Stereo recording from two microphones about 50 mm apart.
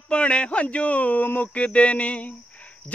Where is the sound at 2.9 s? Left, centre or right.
Centre.